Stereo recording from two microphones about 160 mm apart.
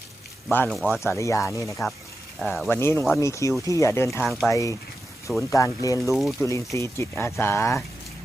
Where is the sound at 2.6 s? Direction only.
15° left (ahead or behind).